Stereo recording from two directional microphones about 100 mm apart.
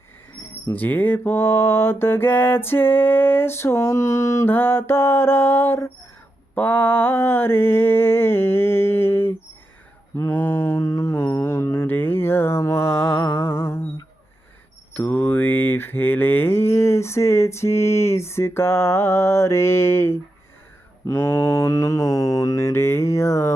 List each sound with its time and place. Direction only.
0.7 s mantra: 20° left (ahead or behind)
14.9 s mantra: 20° left (ahead or behind)